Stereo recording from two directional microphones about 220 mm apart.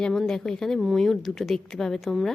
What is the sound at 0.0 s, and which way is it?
A woman's voice, centre (ahead or behind).